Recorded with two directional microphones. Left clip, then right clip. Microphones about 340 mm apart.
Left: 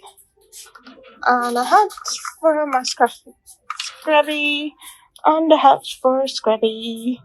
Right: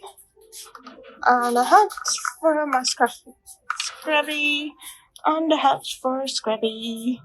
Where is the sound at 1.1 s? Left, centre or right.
Centre.